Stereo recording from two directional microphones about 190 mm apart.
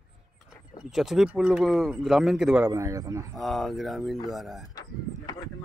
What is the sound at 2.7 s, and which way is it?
Speech, 15° right (ahead or behind).